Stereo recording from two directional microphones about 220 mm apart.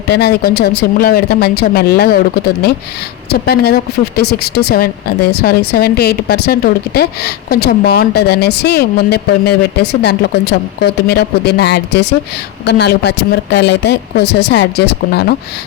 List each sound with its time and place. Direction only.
0.1 s speech: 45° left (ahead or behind)